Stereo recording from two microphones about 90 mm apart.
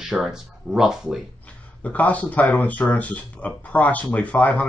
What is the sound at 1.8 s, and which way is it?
Speech, 15° left (ahead or behind).